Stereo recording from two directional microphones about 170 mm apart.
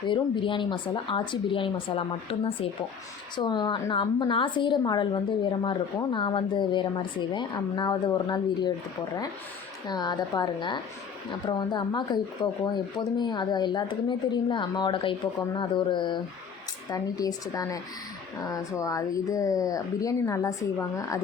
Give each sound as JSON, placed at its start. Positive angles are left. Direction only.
{"t": 0.1, "sound": "a woman's voice", "side_deg": 30}
{"t": 9.8, "sound": "a woman's voice", "side_deg": 25}